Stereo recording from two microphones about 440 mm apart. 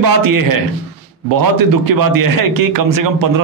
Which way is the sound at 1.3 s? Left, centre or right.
Right.